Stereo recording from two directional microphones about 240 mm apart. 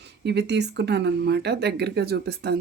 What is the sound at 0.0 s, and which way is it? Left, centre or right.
Speech, right.